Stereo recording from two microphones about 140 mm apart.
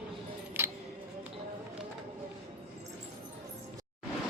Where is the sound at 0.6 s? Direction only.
15° right (ahead or behind).